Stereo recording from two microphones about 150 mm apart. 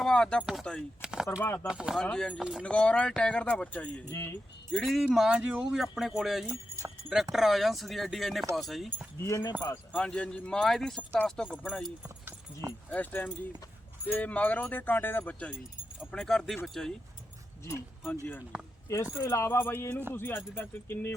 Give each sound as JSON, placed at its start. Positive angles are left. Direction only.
{"t": 0.0, "sound": "speech", "side_deg": 5}
{"t": 1.4, "sound": "speech", "side_deg": 15}
{"t": 1.6, "sound": "speech", "side_deg": -5}
{"t": 2.0, "sound": "speech", "side_deg": 5}
{"t": 2.4, "sound": "speech", "side_deg": -5}
{"t": 2.6, "sound": "speech", "side_deg": 5}
{"t": 4.1, "sound": "speech", "side_deg": 15}
{"t": 4.7, "sound": "speech", "side_deg": 0}
{"t": 9.2, "sound": "speech", "side_deg": 25}
{"t": 9.9, "sound": "speech", "side_deg": 5}
{"t": 12.9, "sound": "speech", "side_deg": 10}
{"t": 18.0, "sound": "speech", "side_deg": 10}